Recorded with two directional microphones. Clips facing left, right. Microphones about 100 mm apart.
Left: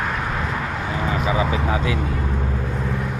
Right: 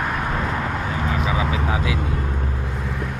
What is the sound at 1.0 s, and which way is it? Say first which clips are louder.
Vehicle: left 3 dB; centre (ahead or behind).